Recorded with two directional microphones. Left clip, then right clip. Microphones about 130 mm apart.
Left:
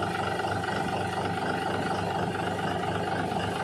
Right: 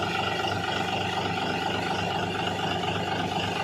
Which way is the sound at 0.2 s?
20° right (ahead or behind).